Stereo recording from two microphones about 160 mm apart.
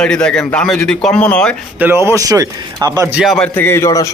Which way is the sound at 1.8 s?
15° right (ahead or behind).